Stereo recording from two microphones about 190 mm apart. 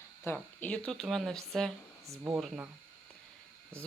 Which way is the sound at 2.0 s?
15° right (ahead or behind).